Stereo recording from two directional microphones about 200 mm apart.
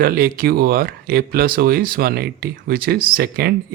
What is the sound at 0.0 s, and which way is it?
Speech, 45° right (ahead or behind).